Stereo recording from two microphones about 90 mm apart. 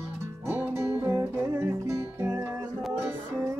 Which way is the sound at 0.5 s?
25° right (ahead or behind).